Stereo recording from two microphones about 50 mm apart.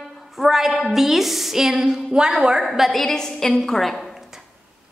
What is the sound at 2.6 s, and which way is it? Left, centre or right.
A woman's voice, centre.